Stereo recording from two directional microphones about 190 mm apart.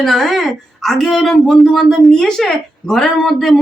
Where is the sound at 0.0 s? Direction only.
Centre (ahead or behind).